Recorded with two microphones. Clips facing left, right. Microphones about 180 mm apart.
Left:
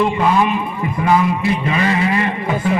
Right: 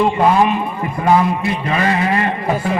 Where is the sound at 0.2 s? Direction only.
40° right (ahead or behind).